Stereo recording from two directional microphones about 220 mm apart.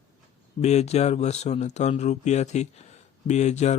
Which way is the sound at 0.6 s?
30° left (ahead or behind).